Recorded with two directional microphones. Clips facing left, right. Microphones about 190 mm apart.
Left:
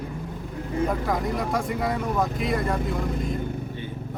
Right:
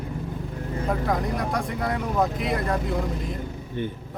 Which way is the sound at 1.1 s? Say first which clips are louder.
Even; centre (ahead or behind).